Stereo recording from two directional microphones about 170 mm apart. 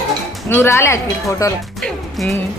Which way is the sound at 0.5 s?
15° left (ahead or behind).